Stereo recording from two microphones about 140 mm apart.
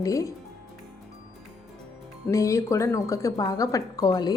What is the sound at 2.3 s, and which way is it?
Speech, 20° left (ahead or behind).